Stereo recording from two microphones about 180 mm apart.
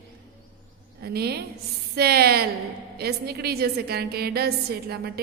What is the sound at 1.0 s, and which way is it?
A woman's voice, 60° right (ahead or behind).